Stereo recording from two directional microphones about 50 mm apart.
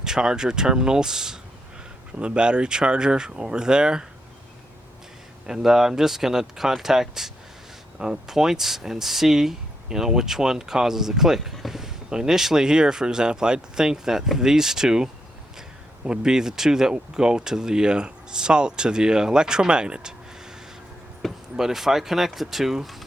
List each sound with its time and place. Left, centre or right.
0.0 s speech: centre
5.5 s speech: centre
21.5 s speech: centre